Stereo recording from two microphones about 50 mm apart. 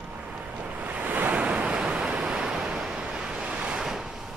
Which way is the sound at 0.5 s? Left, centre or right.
Right.